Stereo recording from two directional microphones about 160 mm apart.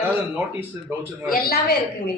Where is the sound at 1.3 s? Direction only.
70° left (ahead or behind).